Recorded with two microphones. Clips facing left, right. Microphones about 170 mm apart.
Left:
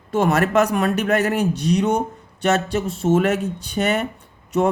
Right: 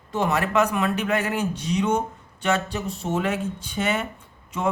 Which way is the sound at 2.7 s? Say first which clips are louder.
Left 8 dB; 90° left.